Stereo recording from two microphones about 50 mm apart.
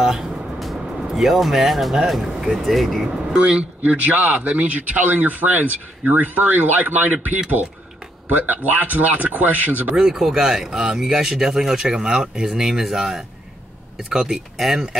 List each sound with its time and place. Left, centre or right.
0.0 s music: centre
0.7 s speech: centre
3.3 s speech: right
3.9 s speech: right
9.9 s speech: centre